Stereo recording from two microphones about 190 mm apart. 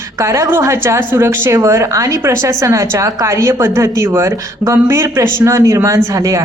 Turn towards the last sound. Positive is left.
turn(degrees=-15)  # may be behind; listen again after turning